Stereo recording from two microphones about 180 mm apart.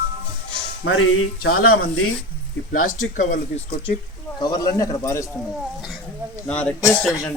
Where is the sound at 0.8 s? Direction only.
90° left.